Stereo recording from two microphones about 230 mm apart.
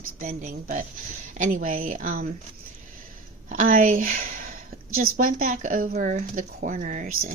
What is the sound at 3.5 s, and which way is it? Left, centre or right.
Speech, right.